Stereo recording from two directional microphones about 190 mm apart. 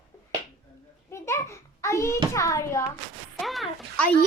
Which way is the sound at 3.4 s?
Centre (ahead or behind).